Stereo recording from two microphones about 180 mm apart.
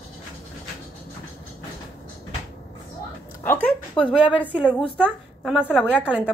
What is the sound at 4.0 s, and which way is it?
A woman's voice, 5° right (ahead or behind).